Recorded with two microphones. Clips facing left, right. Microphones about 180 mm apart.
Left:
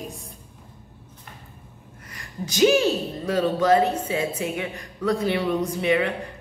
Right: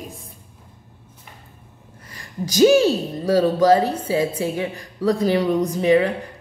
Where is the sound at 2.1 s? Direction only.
35° right (ahead or behind).